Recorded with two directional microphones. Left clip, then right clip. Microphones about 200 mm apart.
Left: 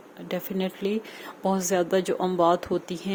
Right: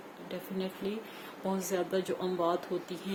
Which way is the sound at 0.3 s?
50° left (ahead or behind).